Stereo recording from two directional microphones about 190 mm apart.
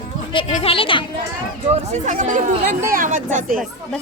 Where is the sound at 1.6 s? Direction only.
35° right (ahead or behind).